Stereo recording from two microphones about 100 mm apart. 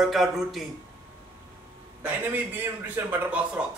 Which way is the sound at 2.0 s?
20° right (ahead or behind).